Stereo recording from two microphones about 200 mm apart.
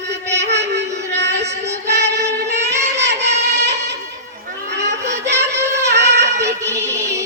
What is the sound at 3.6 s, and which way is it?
Music, 55° right (ahead or behind).